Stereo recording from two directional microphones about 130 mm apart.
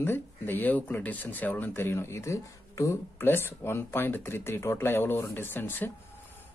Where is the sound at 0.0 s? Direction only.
15° left (ahead or behind).